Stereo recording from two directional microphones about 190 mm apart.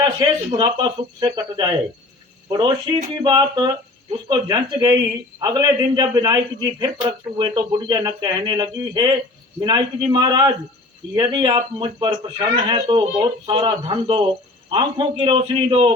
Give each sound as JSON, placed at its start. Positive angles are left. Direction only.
{"t": 0.0, "sound": "a man's voice", "side_deg": -25}